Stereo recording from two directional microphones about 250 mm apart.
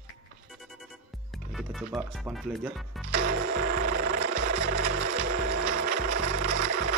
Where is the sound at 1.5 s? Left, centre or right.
Centre.